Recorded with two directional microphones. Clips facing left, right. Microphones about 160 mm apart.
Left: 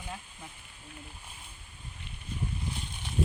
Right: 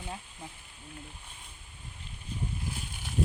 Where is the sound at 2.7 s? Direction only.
5° right (ahead or behind).